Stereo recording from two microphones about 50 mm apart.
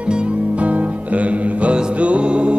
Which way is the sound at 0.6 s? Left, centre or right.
Right.